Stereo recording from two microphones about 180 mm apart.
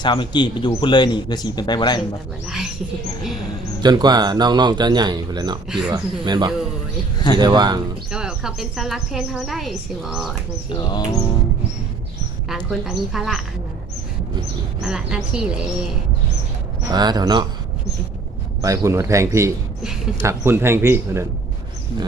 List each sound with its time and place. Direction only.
0.0 s speech: 25° left (ahead or behind)
3.8 s speech: 25° right (ahead or behind)
5.6 s a woman's voice: 5° right (ahead or behind)
5.9 s speech: 25° right (ahead or behind)
8.1 s a woman's voice: 5° right (ahead or behind)
10.7 s speech: 20° left (ahead or behind)
12.5 s a woman's voice: centre (ahead or behind)
14.8 s a woman's voice: 5° right (ahead or behind)
16.9 s speech: 25° right (ahead or behind)
18.6 s a man's voice: 20° right (ahead or behind)